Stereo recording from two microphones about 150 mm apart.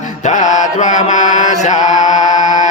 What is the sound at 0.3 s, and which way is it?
Mantra, 55° left (ahead or behind).